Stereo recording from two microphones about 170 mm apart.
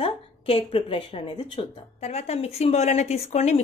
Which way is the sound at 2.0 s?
40° left (ahead or behind).